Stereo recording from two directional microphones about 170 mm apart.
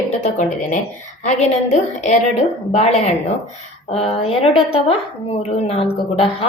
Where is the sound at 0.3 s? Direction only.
45° left (ahead or behind).